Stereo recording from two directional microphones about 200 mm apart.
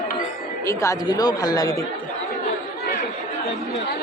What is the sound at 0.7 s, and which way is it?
Speech, 15° left (ahead or behind).